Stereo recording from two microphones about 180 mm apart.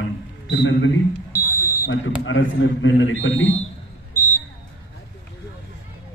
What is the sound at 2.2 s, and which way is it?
A man's voice, 90° left.